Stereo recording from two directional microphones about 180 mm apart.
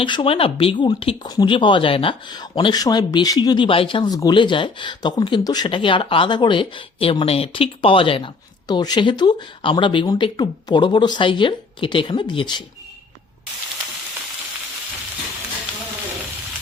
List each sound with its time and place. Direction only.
0.0 s speech: 25° left (ahead or behind)